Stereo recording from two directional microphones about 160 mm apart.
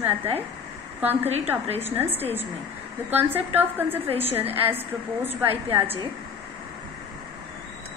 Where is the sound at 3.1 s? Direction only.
10° right (ahead or behind).